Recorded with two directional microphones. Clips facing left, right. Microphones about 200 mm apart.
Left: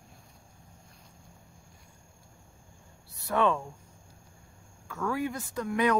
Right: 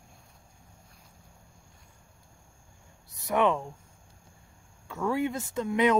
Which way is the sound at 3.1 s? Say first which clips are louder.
Right 1 dB; 20° right (ahead or behind).